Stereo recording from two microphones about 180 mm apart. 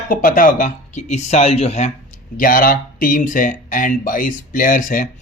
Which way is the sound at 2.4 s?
50° left (ahead or behind).